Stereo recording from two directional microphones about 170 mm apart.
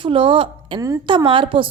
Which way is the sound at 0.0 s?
30° right (ahead or behind).